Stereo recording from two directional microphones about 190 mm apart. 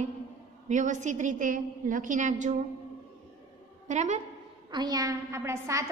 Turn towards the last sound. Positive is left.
turn(degrees=-15)  # may be behind; listen again after turning